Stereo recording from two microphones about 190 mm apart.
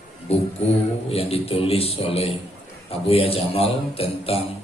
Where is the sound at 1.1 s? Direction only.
30° left (ahead or behind).